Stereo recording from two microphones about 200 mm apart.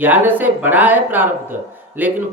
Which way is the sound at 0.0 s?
10° right (ahead or behind).